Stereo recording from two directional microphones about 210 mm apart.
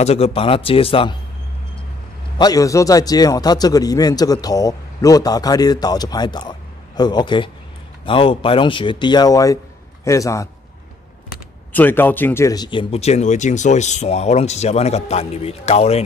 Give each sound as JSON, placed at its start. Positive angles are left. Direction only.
{"t": 0.0, "sound": "speech", "side_deg": 30}
{"t": 2.3, "sound": "a man's voice", "side_deg": 20}
{"t": 11.7, "sound": "speech", "side_deg": 10}